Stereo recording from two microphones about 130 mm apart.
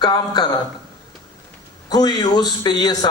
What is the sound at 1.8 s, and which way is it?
A man's voice, 35° left (ahead or behind).